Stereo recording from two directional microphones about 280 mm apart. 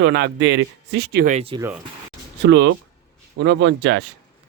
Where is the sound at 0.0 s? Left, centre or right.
Right.